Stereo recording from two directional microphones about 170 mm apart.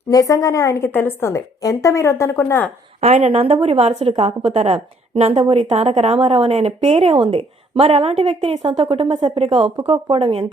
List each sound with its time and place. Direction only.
0.1 s a woman's voice: 20° left (ahead or behind)
3.0 s a woman's voice: 45° right (ahead or behind)